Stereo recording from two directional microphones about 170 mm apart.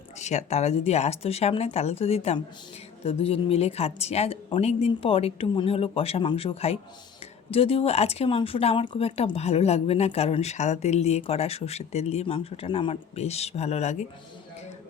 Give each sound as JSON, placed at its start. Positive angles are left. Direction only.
{"t": 0.2, "sound": "speech", "side_deg": 40}